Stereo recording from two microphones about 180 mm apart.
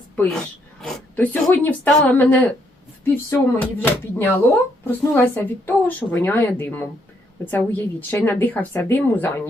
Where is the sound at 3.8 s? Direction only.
10° left (ahead or behind).